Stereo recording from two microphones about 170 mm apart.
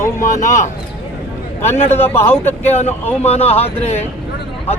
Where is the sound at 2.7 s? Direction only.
40° left (ahead or behind).